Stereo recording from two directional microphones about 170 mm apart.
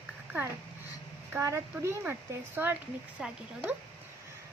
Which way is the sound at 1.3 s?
15° right (ahead or behind).